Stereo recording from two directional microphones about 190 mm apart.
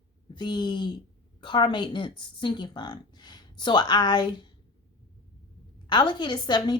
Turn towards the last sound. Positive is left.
turn(degrees=25)  # may be behind; listen again after turning